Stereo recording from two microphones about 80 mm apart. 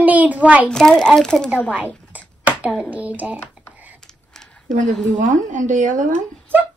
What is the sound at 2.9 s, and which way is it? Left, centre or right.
Speech, centre.